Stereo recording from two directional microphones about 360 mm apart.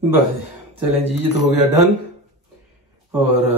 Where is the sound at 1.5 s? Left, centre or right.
Left.